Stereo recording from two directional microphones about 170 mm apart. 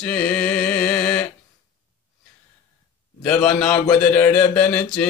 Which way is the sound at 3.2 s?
5° left (ahead or behind).